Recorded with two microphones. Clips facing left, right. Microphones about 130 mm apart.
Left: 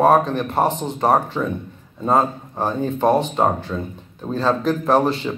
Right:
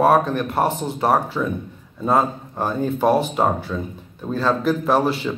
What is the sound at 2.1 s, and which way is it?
Speech, centre (ahead or behind).